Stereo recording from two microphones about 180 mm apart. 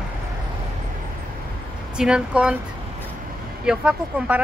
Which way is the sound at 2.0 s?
5° right (ahead or behind).